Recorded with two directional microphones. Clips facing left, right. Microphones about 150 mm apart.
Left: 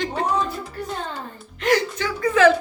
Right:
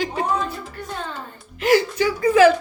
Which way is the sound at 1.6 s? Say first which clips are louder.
Right 3 dB; 5° right (ahead or behind).